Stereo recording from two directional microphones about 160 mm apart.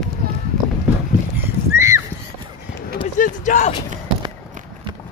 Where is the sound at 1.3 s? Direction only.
15° right (ahead or behind).